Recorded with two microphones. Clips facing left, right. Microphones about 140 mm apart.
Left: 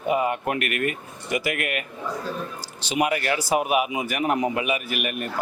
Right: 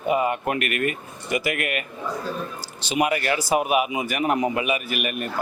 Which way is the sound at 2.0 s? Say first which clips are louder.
Right 1 dB; 25° right (ahead or behind).